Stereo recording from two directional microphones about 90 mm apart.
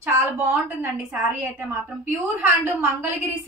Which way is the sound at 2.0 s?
25° right (ahead or behind).